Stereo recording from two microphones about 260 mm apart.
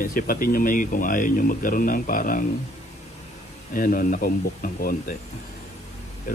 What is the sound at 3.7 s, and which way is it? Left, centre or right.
Speech, left.